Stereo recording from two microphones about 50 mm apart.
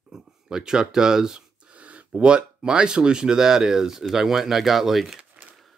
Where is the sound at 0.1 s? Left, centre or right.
Centre.